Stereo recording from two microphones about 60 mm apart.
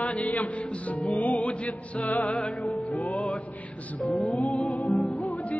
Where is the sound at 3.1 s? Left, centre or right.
Centre.